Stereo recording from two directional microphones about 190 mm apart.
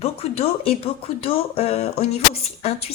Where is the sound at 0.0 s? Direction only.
30° left (ahead or behind).